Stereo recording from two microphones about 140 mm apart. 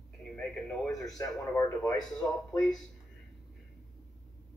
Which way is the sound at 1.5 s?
20° left (ahead or behind).